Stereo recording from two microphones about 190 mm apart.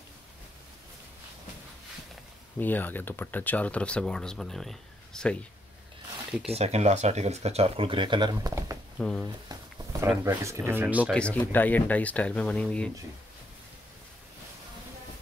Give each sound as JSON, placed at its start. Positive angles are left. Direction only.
{"t": 2.6, "sound": "speech", "side_deg": 10}
{"t": 6.5, "sound": "speech", "side_deg": -35}
{"t": 8.9, "sound": "speech", "side_deg": 5}
{"t": 9.2, "sound": "speech", "side_deg": -15}
{"t": 11.1, "sound": "speech", "side_deg": 5}